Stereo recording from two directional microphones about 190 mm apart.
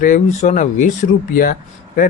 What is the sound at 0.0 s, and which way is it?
Speech, 40° left (ahead or behind).